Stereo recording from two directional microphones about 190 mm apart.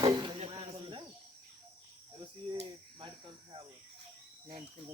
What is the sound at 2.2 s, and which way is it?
Cricket, 25° right (ahead or behind).